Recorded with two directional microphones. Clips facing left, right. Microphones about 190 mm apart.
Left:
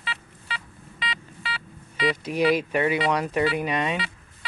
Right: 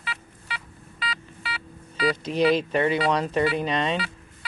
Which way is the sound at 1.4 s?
5° right (ahead or behind).